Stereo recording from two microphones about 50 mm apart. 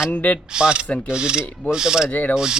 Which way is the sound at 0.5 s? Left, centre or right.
Centre.